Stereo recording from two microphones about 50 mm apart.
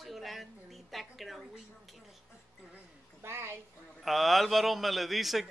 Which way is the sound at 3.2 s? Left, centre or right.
Right.